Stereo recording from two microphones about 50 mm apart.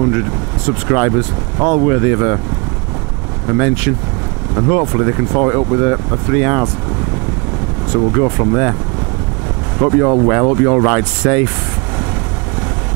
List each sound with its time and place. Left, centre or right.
0.1 s speech: right
3.4 s speech: right
7.9 s speech: right
9.8 s speech: right